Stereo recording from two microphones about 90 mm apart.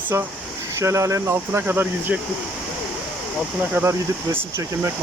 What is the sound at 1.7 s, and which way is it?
Speech, 20° right (ahead or behind).